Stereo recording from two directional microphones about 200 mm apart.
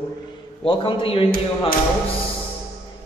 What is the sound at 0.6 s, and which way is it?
Speech, 25° left (ahead or behind).